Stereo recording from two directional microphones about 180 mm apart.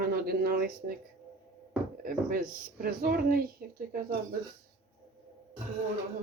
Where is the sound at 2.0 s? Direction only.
50° right (ahead or behind).